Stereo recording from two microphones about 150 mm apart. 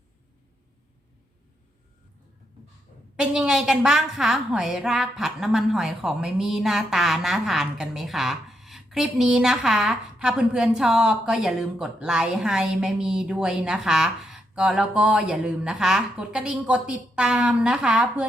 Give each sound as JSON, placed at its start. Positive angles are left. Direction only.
{"t": 3.2, "sound": "a woman's voice", "side_deg": -5}